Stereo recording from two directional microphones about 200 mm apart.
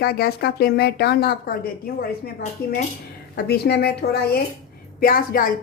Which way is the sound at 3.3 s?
55° left (ahead or behind).